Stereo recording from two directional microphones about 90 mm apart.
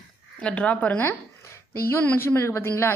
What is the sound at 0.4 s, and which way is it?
A woman's voice, 15° left (ahead or behind).